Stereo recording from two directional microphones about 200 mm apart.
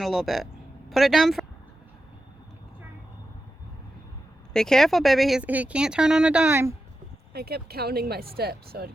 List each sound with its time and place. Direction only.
0.0 s speech: centre (ahead or behind)
4.5 s speech: centre (ahead or behind)
7.3 s speech: 50° right (ahead or behind)